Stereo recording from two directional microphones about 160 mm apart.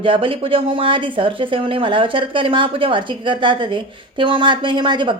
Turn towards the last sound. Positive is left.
turn(degrees=-30)  # may be behind; listen again after turning